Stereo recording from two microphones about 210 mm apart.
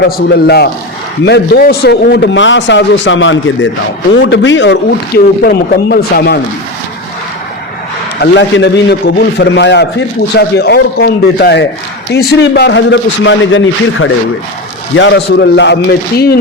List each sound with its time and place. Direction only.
0.0 s a man's voice: 50° left (ahead or behind)
8.2 s a man's voice: 55° left (ahead or behind)